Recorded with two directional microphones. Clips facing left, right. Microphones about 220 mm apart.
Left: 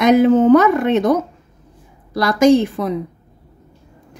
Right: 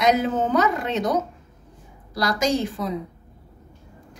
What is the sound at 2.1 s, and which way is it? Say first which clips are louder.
Speech: left 10 dB; 55° left (ahead or behind).